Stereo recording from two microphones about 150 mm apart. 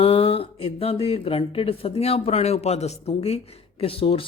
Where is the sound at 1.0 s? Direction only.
40° left (ahead or behind).